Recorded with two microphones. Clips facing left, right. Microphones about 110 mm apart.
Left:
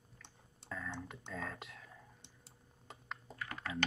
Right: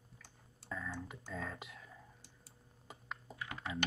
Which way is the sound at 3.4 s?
15° right (ahead or behind).